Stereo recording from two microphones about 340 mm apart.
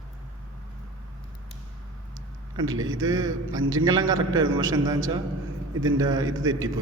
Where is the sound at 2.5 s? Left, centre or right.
Centre.